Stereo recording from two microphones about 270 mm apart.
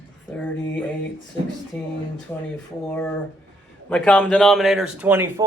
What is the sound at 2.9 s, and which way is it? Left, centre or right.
Speech, centre.